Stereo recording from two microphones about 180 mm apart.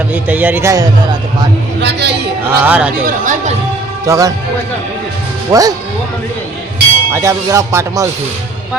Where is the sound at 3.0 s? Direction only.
45° right (ahead or behind).